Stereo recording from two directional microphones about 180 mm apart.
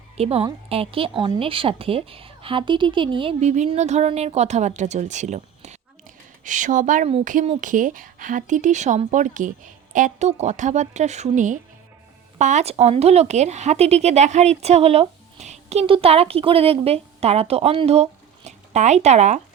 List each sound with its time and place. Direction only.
0.2 s speech: 35° right (ahead or behind)